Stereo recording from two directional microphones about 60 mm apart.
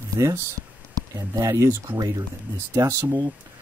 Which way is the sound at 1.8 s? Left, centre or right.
Right.